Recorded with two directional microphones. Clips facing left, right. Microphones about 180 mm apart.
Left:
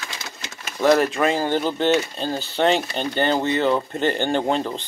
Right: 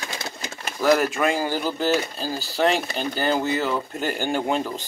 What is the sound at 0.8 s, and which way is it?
Speech, centre (ahead or behind).